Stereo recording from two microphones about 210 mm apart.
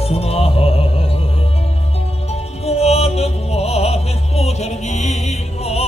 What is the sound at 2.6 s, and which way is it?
Music, 30° left (ahead or behind).